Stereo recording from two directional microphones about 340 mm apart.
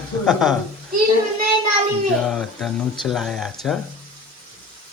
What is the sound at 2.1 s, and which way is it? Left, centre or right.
Speech, centre.